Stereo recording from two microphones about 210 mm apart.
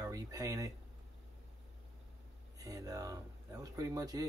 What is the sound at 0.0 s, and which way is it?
Speech, 15° right (ahead or behind).